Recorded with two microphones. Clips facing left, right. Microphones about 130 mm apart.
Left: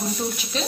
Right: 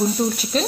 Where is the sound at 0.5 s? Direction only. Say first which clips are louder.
Right 6 dB; 45° right (ahead or behind).